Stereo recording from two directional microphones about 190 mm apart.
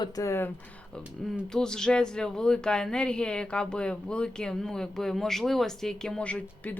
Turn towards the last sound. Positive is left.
turn(degrees=5)  # may be behind; listen again after turning